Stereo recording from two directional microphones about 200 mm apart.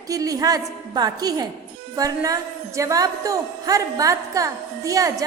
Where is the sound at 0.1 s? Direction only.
15° right (ahead or behind).